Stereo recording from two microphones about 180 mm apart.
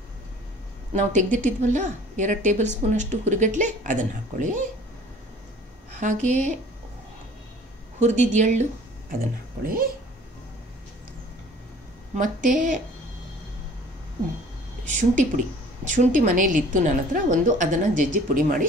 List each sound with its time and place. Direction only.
0.9 s a woman's voice: 45° right (ahead or behind)
5.9 s a woman's voice: 40° right (ahead or behind)
8.0 s a woman's voice: 40° right (ahead or behind)
9.7 s a woman's voice: 50° right (ahead or behind)
12.2 s a woman's voice: 45° right (ahead or behind)
14.9 s a woman's voice: 45° right (ahead or behind)